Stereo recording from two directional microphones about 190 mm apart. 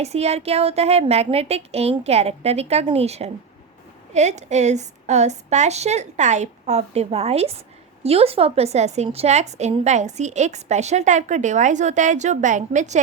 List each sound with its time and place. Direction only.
0.0 s a woman's voice: 35° right (ahead or behind)